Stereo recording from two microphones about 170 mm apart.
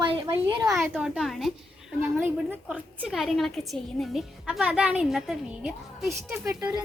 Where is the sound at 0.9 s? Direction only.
Centre (ahead or behind).